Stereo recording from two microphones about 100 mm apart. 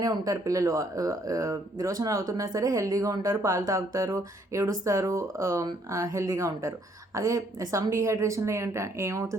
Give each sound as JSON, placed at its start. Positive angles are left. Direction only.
{"t": 0.0, "sound": "speech", "side_deg": -35}